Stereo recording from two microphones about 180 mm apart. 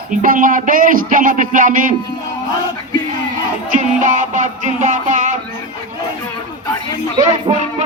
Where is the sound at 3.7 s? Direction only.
45° right (ahead or behind).